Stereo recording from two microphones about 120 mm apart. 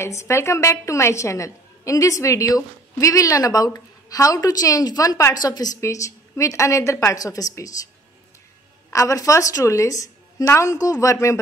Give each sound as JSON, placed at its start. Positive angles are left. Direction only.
{"t": 0.0, "sound": "a woman's voice", "side_deg": 25}
{"t": 8.9, "sound": "a woman's voice", "side_deg": 25}